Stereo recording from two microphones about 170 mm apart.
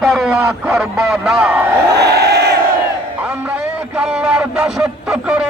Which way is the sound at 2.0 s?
75° right (ahead or behind).